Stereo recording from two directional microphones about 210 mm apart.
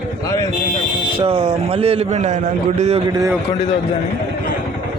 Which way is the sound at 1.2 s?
25° right (ahead or behind).